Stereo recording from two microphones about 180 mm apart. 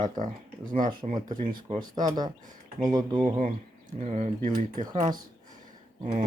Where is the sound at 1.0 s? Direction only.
40° right (ahead or behind).